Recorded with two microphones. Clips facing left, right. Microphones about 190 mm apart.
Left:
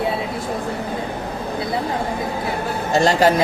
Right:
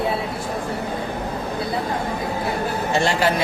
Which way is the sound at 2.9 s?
40° left (ahead or behind).